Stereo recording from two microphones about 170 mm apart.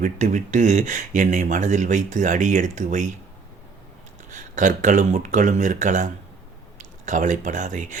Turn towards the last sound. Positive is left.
turn(degrees=-50)  # may be behind; listen again after turning